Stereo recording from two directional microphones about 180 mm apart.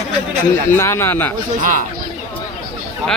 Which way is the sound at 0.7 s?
15° left (ahead or behind).